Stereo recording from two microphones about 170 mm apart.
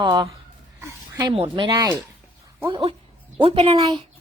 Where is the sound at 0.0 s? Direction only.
25° right (ahead or behind).